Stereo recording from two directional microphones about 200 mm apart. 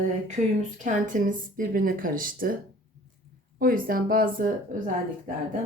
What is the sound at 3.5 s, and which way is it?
Speech, 45° right (ahead or behind).